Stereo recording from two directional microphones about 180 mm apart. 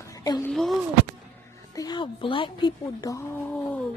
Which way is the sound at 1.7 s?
20° left (ahead or behind).